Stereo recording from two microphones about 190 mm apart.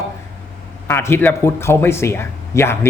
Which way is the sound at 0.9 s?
10° left (ahead or behind).